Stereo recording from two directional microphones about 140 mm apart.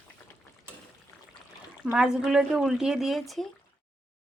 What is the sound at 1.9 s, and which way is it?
A woman's voice, 5° right (ahead or behind).